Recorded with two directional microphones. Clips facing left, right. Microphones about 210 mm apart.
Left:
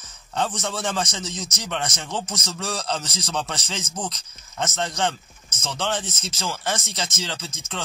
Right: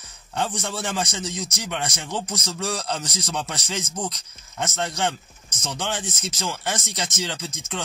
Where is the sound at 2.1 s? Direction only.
15° right (ahead or behind).